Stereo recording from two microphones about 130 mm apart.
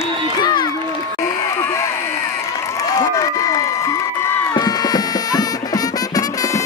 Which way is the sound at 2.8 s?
25° left (ahead or behind).